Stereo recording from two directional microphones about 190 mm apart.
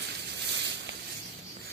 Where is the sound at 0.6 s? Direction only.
70° right (ahead or behind).